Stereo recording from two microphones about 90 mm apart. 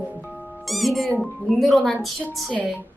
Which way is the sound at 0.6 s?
Centre (ahead or behind).